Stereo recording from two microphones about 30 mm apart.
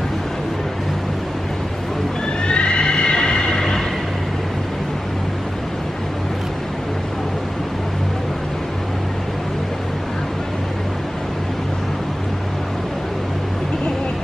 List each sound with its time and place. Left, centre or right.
2.4 s neigh: left